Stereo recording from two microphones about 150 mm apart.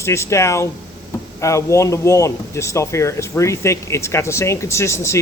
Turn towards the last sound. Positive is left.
turn(degrees=20)  # may be behind; listen again after turning